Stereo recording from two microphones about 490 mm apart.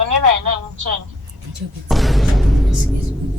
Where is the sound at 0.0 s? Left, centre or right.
Right.